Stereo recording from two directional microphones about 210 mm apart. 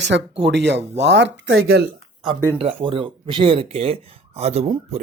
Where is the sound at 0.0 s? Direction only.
55° right (ahead or behind).